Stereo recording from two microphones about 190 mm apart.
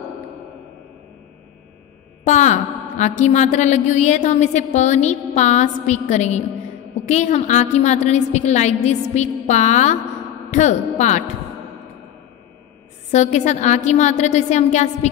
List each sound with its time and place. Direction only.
2.2 s a woman's voice: 40° left (ahead or behind)
13.1 s a woman's voice: 35° left (ahead or behind)